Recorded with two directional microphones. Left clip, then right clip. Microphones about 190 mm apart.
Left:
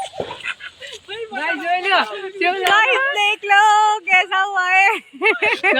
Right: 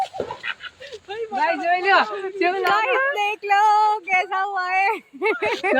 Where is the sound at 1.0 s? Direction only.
45° right (ahead or behind).